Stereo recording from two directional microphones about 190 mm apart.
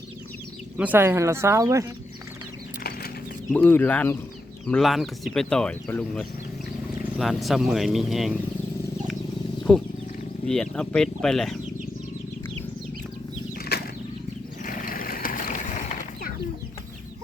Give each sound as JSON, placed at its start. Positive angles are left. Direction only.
{"t": 0.8, "sound": "speech", "side_deg": -10}
{"t": 3.5, "sound": "speech", "side_deg": 10}
{"t": 9.7, "sound": "speech", "side_deg": 5}
{"t": 13.7, "sound": "a sound", "side_deg": 55}